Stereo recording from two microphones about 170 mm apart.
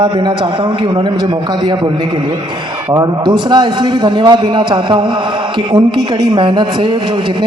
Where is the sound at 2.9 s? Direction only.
25° right (ahead or behind).